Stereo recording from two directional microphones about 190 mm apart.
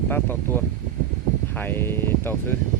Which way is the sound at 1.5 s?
10° left (ahead or behind).